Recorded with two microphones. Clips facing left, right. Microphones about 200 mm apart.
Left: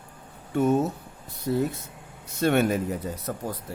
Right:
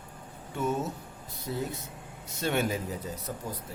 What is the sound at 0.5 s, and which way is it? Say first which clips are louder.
Speech: left 8 dB; 55° left (ahead or behind).